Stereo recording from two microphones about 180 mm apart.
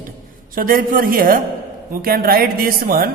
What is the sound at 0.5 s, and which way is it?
A woman's voice, 50° right (ahead or behind).